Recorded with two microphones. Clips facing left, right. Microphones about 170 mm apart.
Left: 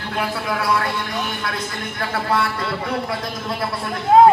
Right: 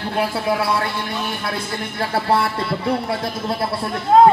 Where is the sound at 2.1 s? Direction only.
30° right (ahead or behind).